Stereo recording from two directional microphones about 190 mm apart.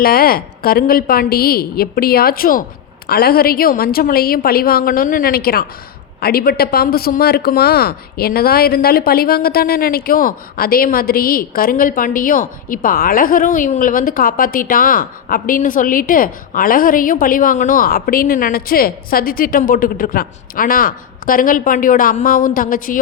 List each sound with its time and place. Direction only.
0.0 s speech: 50° left (ahead or behind)